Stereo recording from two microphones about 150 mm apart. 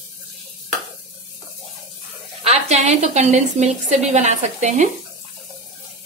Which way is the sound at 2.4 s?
50° right (ahead or behind).